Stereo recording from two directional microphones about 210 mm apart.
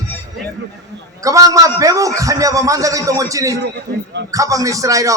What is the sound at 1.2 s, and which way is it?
A man's voice, 15° right (ahead or behind).